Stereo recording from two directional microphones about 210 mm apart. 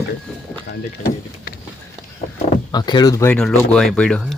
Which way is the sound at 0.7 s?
50° left (ahead or behind).